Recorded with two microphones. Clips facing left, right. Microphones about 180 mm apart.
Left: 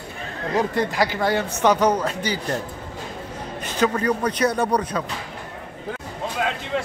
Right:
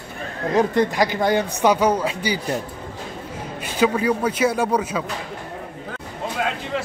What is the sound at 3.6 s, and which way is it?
A man's voice, 10° right (ahead or behind).